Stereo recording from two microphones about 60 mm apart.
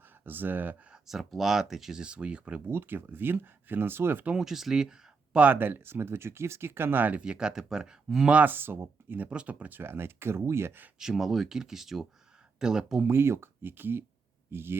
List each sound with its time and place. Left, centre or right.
0.3 s speech: right
1.0 s speech: centre
2.6 s speech: right
4.4 s speech: centre
5.4 s speech: right
7.2 s speech: centre
8.4 s speech: right
9.3 s speech: right
11.0 s speech: centre
13.1 s speech: right